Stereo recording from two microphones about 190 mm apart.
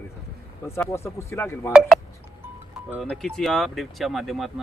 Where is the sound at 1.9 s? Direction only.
Centre (ahead or behind).